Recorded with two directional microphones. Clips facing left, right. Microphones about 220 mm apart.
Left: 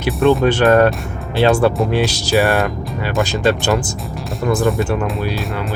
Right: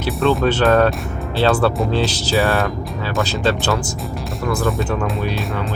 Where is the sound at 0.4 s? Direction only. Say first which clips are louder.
Left 2 dB; 15° left (ahead or behind).